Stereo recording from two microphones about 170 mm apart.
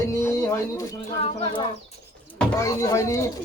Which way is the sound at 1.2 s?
35° left (ahead or behind).